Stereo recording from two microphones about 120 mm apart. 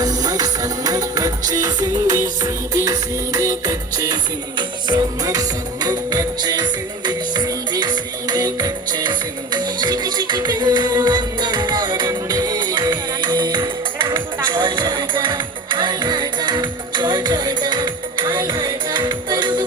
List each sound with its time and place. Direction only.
0.0 s music: 30° right (ahead or behind)